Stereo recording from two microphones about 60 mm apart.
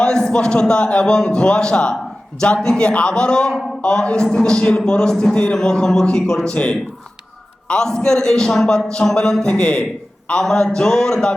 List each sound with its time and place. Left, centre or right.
0.0 s a man's voice: centre